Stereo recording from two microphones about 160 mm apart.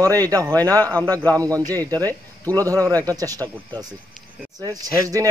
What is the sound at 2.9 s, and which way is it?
Speech, 20° right (ahead or behind).